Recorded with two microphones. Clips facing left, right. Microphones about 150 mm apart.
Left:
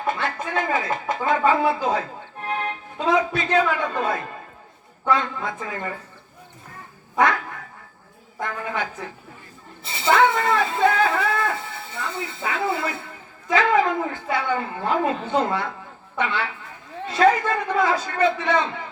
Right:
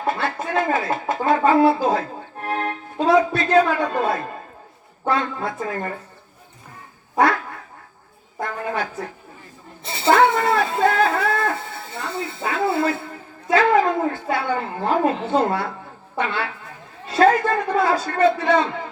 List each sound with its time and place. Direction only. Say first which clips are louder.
0.5 s a woman's voice: right 3 dB; 35° right (ahead or behind)
8.4 s a woman's voice: right 2 dB; 40° right (ahead or behind)
10.0 s a sound: right 2 dB; 40° right (ahead or behind)
11.9 s a woman's voice: right 2 dB; 45° right (ahead or behind)